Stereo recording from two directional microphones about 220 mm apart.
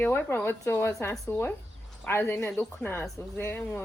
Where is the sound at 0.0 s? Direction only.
10° left (ahead or behind).